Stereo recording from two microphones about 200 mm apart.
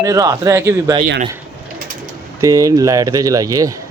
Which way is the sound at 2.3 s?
15° right (ahead or behind).